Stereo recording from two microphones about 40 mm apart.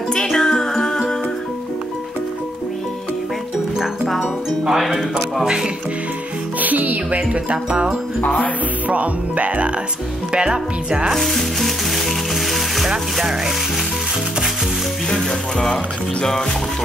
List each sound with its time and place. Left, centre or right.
0.4 s music: centre
3.7 s music: centre
5.4 s sizzle: centre
6.6 s music: right
7.2 s music: right
7.5 s speech: right
8.2 s music: left
8.8 s music: right
10.3 s speech: right
11.1 s music: centre
13.2 s sizzle: centre
15.0 s music: centre